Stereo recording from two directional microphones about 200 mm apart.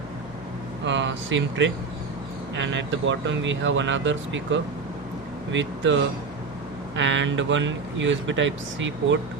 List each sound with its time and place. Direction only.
0.9 s speech: 65° right (ahead or behind)